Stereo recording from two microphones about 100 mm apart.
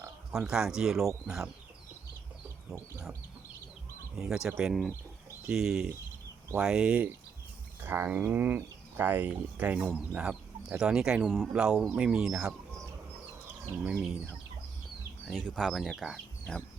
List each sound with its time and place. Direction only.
0.3 s speech: 5° right (ahead or behind)
4.2 s speech: 5° right (ahead or behind)
13.8 s speech: 10° right (ahead or behind)
15.3 s speech: 5° left (ahead or behind)